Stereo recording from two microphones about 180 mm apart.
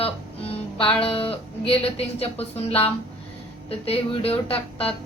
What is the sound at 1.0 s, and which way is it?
A woman's voice, 30° left (ahead or behind).